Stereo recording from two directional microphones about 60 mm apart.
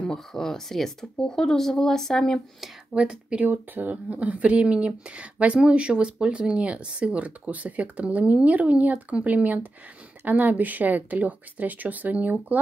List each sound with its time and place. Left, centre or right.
0.0 s speech: centre
2.6 s speech: centre
3.4 s speech: right